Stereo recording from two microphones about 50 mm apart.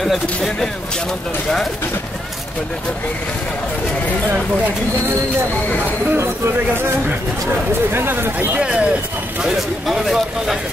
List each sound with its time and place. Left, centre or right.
0.0 s speech: centre
6.1 s speech: right
7.9 s speech: right
8.5 s speech: right
9.8 s speech: centre